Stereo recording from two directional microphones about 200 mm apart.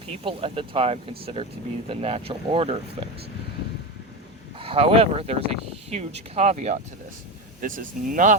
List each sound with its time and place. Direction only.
0.3 s speech: 25° right (ahead or behind)
4.6 s speech: 30° right (ahead or behind)